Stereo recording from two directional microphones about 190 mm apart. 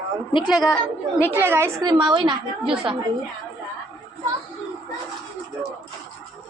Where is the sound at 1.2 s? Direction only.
10° right (ahead or behind); by 2.9 s 25° right (ahead or behind).